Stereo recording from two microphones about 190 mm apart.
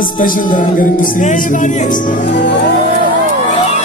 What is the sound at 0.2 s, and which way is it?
Music, 45° left (ahead or behind).